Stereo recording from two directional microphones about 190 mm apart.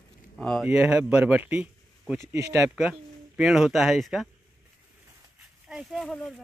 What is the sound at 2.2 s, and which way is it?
Speech, 15° right (ahead or behind).